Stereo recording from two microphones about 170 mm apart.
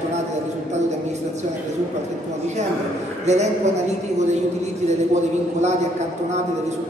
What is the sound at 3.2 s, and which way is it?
Speech, 40° right (ahead or behind).